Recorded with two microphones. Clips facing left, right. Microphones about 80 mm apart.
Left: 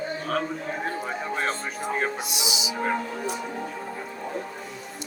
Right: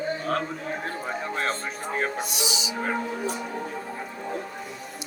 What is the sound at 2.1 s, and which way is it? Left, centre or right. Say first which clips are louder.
Speech: right 1 dB; right.